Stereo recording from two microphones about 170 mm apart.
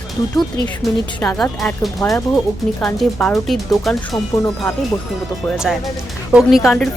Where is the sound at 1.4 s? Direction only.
5° left (ahead or behind).